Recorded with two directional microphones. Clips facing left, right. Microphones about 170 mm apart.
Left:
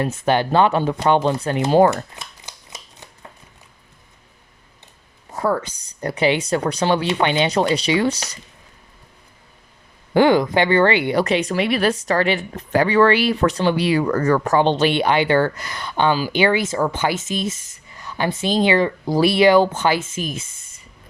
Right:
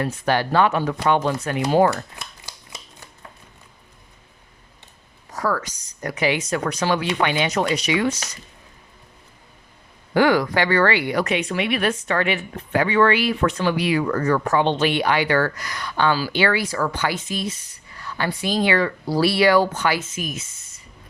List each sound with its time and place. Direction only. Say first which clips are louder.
0.0 s speech: left 3 dB; 25° left (ahead or behind)
5.3 s a woman's voice: left 3 dB; 25° left (ahead or behind)
10.2 s speech: left 3 dB; 25° left (ahead or behind)